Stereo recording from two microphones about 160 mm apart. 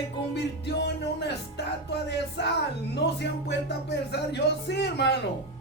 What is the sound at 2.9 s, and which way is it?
A woman's voice, 90° left.